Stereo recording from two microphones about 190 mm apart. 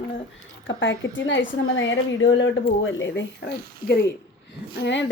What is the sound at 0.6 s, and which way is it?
A woman's voice, 75° left (ahead or behind).